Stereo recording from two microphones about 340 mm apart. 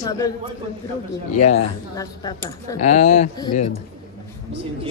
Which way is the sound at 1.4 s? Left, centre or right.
Centre.